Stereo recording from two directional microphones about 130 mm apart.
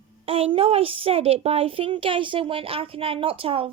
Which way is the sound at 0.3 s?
50° right (ahead or behind).